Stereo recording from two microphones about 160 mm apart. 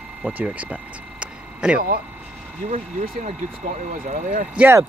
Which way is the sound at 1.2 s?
5° right (ahead or behind).